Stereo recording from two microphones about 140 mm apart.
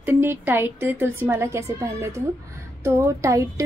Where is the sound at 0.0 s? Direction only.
15° right (ahead or behind).